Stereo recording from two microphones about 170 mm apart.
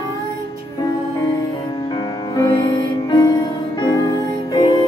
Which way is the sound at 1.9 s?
25° left (ahead or behind).